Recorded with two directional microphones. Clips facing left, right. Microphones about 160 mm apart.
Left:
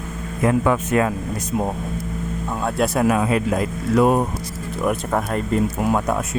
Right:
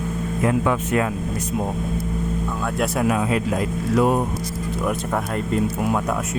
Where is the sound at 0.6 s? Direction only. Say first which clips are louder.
Left 2 dB; 50° left (ahead or behind).